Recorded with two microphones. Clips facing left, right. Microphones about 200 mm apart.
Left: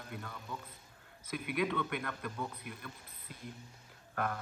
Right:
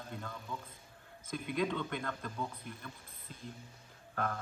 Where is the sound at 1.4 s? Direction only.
55° left (ahead or behind).